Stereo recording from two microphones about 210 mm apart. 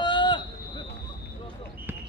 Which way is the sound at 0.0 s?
20° left (ahead or behind).